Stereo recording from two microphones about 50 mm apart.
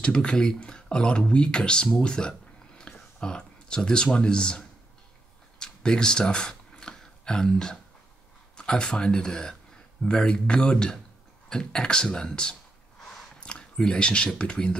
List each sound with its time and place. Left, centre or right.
0.0 s speech: centre
5.6 s a sound: centre
8.5 s speech: centre